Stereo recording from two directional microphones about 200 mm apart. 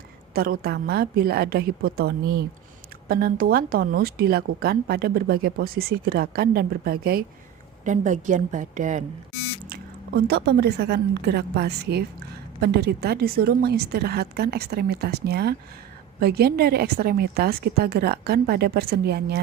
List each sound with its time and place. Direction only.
0.3 s a woman's voice: 45° right (ahead or behind)
10.2 s a woman's voice: 55° right (ahead or behind)